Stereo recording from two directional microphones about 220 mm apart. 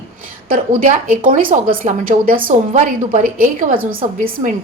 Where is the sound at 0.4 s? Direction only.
40° right (ahead or behind).